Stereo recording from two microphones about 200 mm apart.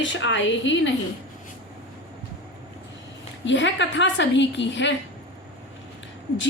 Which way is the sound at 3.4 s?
65° left (ahead or behind).